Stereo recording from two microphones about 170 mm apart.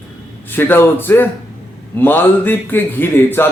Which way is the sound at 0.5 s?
10° left (ahead or behind).